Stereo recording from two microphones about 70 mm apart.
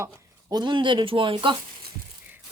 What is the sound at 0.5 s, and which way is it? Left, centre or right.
Speech, right.